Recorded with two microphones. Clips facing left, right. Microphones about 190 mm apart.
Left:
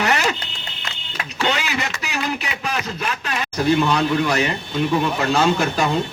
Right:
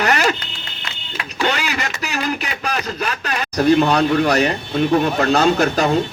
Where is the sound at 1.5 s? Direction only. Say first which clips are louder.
Right 1 dB; 45° right (ahead or behind).